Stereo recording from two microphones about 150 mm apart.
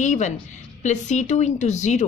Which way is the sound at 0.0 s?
55° left (ahead or behind).